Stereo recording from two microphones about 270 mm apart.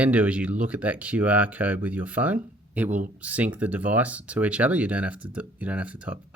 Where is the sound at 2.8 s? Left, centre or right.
Right.